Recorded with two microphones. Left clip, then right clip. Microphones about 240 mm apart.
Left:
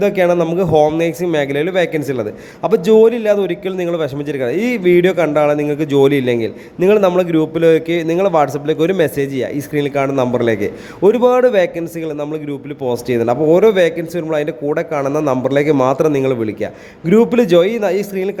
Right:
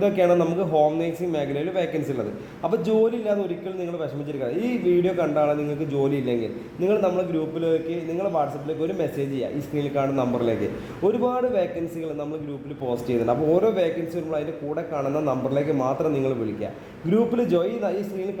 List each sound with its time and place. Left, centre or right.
0.0 s a man's voice: left